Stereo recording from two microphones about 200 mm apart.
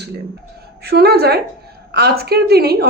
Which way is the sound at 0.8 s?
55° right (ahead or behind).